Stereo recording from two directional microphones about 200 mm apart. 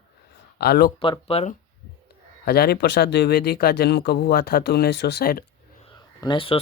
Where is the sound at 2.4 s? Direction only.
50° left (ahead or behind).